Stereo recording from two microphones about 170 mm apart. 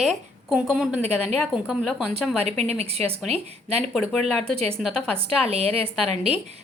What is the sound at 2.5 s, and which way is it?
Speech, 40° right (ahead or behind).